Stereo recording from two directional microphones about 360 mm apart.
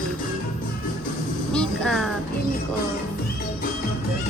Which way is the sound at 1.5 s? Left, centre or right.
Centre.